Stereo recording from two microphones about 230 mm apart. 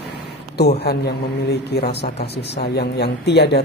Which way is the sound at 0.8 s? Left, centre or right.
Left.